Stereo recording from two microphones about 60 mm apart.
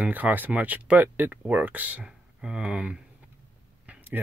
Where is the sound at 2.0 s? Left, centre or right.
Centre.